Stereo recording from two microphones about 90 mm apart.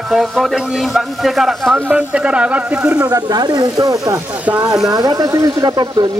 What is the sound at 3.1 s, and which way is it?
Speech, 50° right (ahead or behind).